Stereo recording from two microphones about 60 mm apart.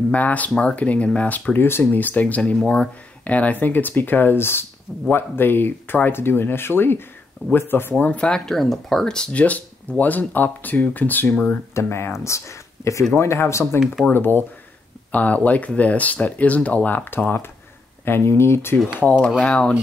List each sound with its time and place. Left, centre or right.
0.1 s speech: left
1.6 s speech: left
1.9 s speech: left
2.5 s speech: centre; by 7.9 s left
8.0 s speech: left
8.5 s speech: centre
9.4 s speech: left
11.7 s speech: left
13.1 s speech: left
14.1 s speech: left
18.9 s speech: left